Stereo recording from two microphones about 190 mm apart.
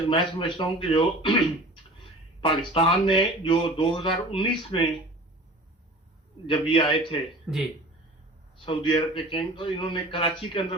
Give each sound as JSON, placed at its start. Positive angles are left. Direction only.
{"t": 0.1, "sound": "speech", "side_deg": 25}
{"t": 2.4, "sound": "speech", "side_deg": 25}
{"t": 6.5, "sound": "speech", "side_deg": 25}
{"t": 7.5, "sound": "speech", "side_deg": 0}
{"t": 8.6, "sound": "speech", "side_deg": 25}